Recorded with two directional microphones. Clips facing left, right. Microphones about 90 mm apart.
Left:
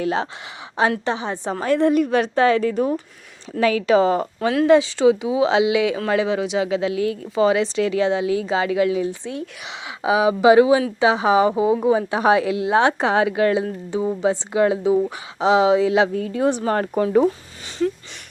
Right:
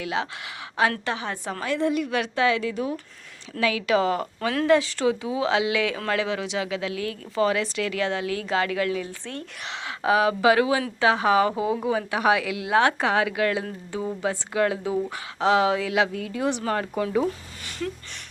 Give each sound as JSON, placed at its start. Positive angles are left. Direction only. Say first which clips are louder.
{"t": 0.0, "sound": "speech", "louder": "left 6 dB", "side_deg": 35}
{"t": 0.8, "sound": "speech", "louder": "left 4 dB", "side_deg": 25}
{"t": 1.6, "sound": "a woman's voice", "louder": "left 7 dB", "side_deg": 45}